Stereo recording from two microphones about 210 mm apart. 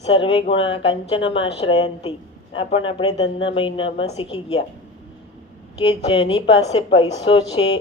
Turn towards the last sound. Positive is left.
turn(degrees=25)  # may be behind; listen again after turning